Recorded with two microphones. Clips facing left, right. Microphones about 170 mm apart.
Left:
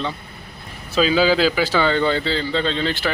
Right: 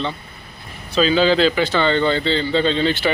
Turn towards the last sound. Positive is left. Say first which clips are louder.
# right 4 dB
turn(degrees=0)  # may be behind; listen again after turning